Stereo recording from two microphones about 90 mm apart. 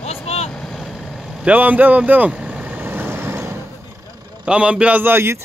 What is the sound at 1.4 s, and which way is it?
Vehicle, 20° right (ahead or behind).